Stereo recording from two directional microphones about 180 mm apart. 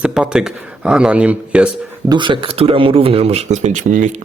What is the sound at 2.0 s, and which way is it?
A man's voice, 25° right (ahead or behind).